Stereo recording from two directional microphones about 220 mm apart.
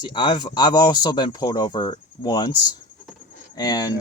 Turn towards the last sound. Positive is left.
turn(degrees=15)  # may be behind; listen again after turning